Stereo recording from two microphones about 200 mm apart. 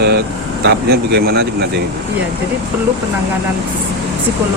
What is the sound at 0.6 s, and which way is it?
Speech, 55° right (ahead or behind).